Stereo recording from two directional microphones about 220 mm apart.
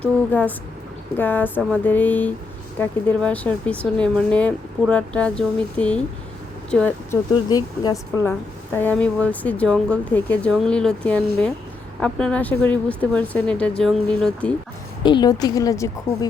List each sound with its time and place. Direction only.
0.0 s speech: 5° left (ahead or behind)
15.0 s speech: 20° left (ahead or behind)